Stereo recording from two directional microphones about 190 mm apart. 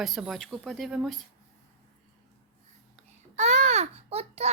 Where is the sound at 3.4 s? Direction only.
35° right (ahead or behind).